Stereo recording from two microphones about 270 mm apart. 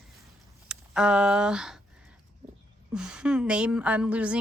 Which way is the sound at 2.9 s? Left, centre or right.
Centre.